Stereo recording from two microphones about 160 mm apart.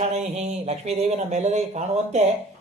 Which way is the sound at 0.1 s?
40° right (ahead or behind).